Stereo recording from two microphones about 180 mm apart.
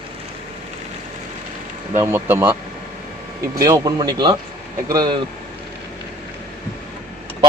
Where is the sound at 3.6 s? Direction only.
20° right (ahead or behind).